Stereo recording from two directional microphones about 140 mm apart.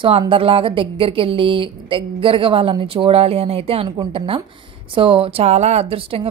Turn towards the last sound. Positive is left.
turn(degrees=-40)  # may be behind; listen again after turning